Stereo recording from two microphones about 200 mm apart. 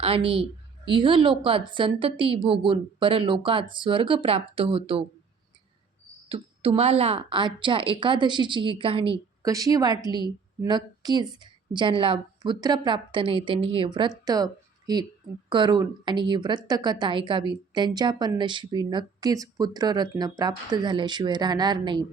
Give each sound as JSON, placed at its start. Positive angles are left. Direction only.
{"t": 0.0, "sound": "a woman's voice", "side_deg": -30}
{"t": 6.2, "sound": "a woman's voice", "side_deg": -30}
{"t": 14.3, "sound": "a sound", "side_deg": -20}
{"t": 15.4, "sound": "a woman's voice", "side_deg": -25}